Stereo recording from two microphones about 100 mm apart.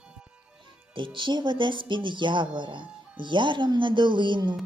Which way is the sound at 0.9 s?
55° right (ahead or behind).